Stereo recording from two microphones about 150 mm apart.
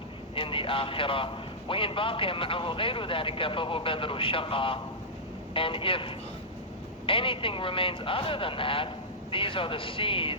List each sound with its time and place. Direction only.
0.3 s a man's voice: 35° left (ahead or behind)